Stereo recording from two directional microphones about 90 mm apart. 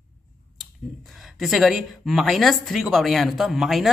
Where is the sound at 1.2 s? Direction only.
Centre (ahead or behind).